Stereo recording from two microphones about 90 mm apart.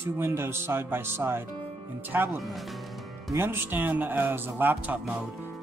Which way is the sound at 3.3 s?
25° right (ahead or behind).